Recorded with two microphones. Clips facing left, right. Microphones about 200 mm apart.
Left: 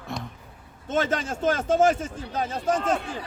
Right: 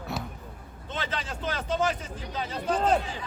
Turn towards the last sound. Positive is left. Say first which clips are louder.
# left 1 dB
turn(degrees=50)  # may be behind; listen again after turning